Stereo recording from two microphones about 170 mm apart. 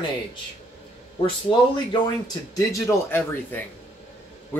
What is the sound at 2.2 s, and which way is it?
Speech, 20° left (ahead or behind).